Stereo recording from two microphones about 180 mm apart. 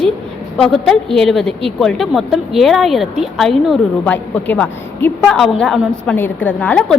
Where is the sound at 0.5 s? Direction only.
5° left (ahead or behind).